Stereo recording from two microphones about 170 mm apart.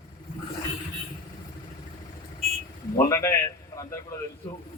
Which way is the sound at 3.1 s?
15° left (ahead or behind).